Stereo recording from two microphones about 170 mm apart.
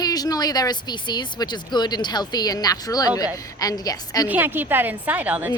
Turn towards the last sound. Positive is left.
turn(degrees=-10)  # may be behind; listen again after turning